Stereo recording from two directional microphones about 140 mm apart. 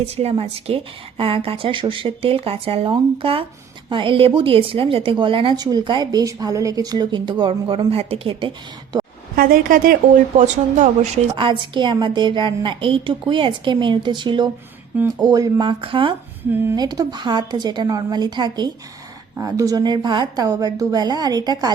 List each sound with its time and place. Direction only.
0.0 s a woman's voice: 45° right (ahead or behind)
9.3 s a woman's voice: 90° right
10.3 s speech: 55° right (ahead or behind)
11.3 s a woman's voice: 35° right (ahead or behind)
15.8 s a woman's voice: 40° right (ahead or behind)